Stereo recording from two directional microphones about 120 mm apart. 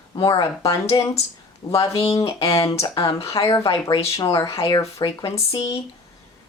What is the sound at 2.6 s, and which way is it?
Speech, 55° left (ahead or behind).